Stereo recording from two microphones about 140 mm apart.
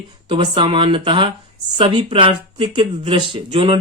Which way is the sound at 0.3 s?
35° right (ahead or behind).